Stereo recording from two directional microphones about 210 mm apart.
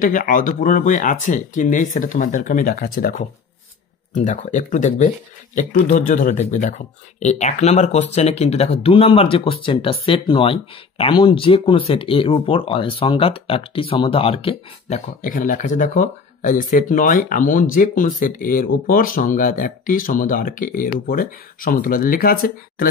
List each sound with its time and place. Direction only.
0.0 s speech: 40° left (ahead or behind)
15.2 s speech: 40° left (ahead or behind)